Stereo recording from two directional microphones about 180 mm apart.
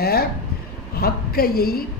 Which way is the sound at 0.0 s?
60° left (ahead or behind).